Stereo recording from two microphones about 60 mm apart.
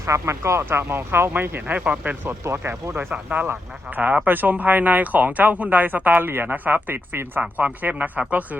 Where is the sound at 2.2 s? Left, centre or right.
Right.